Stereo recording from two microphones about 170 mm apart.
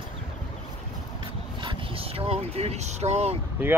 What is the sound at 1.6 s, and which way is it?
Speech, 35° right (ahead or behind).